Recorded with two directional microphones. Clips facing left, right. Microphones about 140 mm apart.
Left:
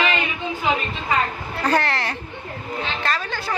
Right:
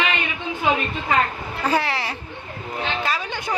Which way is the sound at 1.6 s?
5° right (ahead or behind).